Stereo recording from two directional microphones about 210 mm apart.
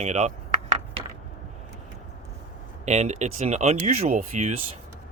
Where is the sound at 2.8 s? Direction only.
30° right (ahead or behind).